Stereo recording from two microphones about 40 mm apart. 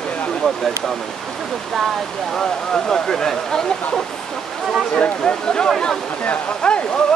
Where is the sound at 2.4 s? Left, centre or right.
Centre.